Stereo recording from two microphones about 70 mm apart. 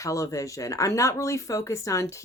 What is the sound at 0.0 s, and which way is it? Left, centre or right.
Speech, left.